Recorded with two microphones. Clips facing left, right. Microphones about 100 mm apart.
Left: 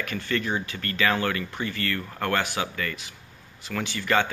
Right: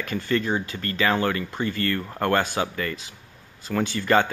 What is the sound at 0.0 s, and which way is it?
Speech, 30° right (ahead or behind).